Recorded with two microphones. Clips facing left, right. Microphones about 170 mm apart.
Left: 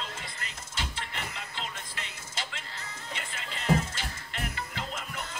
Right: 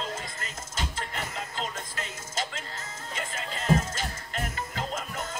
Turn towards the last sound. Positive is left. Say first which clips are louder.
# right 4 dB
turn(degrees=-45)  # may be behind; listen again after turning